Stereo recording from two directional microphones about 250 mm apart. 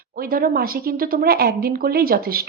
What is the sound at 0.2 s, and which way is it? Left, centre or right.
A woman's voice, right.